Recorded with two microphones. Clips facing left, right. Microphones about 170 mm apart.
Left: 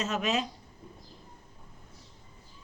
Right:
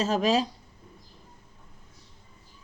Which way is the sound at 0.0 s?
35° right (ahead or behind).